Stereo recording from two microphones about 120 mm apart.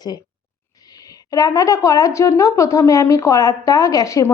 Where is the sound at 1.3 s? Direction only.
30° left (ahead or behind).